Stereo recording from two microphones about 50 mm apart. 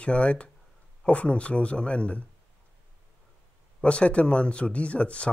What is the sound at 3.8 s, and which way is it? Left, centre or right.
Speech, left.